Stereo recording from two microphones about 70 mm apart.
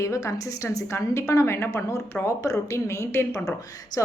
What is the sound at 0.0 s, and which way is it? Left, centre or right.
A woman's voice, left.